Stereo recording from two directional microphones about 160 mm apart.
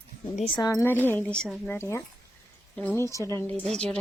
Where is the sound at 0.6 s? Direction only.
20° left (ahead or behind); by 1.7 s centre (ahead or behind).